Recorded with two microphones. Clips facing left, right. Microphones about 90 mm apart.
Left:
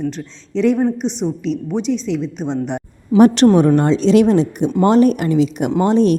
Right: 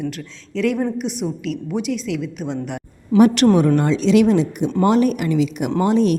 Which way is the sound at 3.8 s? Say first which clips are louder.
Left 3 dB; 35° left (ahead or behind).